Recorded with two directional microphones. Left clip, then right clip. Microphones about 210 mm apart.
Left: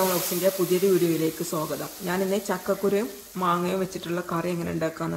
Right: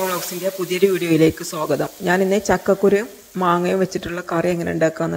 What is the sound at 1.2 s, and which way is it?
Speech, 30° right (ahead or behind).